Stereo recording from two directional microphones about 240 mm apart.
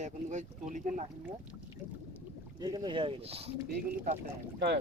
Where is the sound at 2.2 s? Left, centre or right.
Centre.